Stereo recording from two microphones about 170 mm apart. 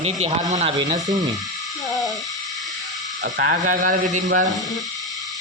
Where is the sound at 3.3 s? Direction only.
60° right (ahead or behind).